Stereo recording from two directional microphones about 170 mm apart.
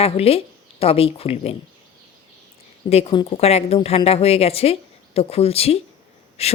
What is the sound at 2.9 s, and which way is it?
Speech, 40° left (ahead or behind).